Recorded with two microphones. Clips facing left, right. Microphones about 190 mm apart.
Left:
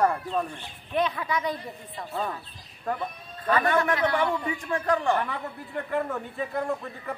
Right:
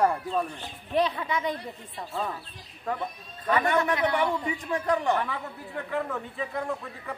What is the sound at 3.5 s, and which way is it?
A man's voice, 20° right (ahead or behind).